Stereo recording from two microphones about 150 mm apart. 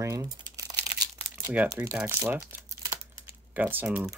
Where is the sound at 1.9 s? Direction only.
15° right (ahead or behind).